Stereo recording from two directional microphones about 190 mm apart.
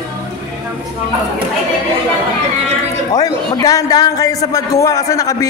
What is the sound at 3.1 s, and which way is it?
A man's voice, 20° left (ahead or behind).